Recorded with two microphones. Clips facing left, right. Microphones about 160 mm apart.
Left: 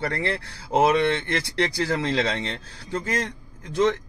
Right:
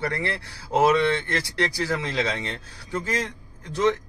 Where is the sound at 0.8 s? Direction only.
20° left (ahead or behind).